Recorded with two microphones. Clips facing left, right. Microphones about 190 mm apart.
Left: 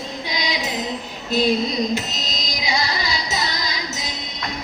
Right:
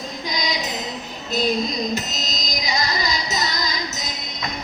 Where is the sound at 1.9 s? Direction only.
45° right (ahead or behind).